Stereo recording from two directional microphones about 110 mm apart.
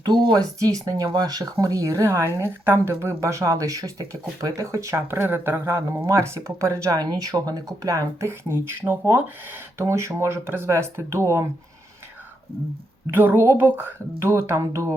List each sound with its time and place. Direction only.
0.0 s speech: 40° right (ahead or behind); by 11.4 s 25° right (ahead or behind)
13.1 s speech: 20° right (ahead or behind)